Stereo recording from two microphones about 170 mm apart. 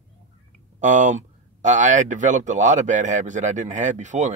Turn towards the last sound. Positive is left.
turn(degrees=-45)  # may be behind; listen again after turning